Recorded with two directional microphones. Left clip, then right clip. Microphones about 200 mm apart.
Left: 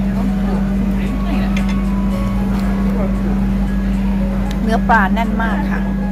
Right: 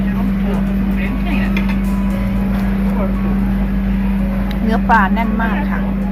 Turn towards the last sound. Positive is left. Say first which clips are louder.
# even
turn(degrees=15)  # may be behind; listen again after turning